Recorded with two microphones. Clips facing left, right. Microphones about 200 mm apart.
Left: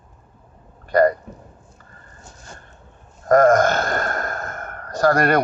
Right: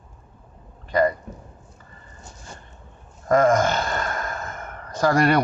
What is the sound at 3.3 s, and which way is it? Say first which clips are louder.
Speech: left 4 dB; 50° left (ahead or behind).